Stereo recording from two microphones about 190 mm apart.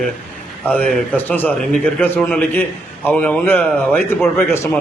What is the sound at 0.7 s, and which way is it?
A man's voice, 5° left (ahead or behind).